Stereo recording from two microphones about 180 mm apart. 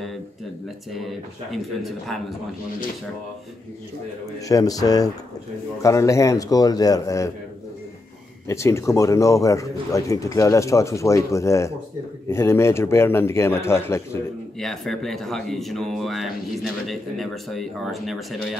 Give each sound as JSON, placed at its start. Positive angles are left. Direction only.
{"t": 0.9, "sound": "speech", "side_deg": 0}
{"t": 4.5, "sound": "speech", "side_deg": 20}
{"t": 8.5, "sound": "speech", "side_deg": 15}
{"t": 14.6, "sound": "speech", "side_deg": 0}